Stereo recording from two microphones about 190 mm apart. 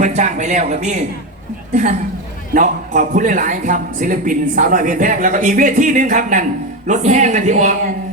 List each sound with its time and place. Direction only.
0.0 s a man's voice: 40° right (ahead or behind)